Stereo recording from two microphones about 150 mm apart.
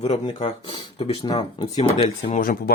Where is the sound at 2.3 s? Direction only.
70° left (ahead or behind).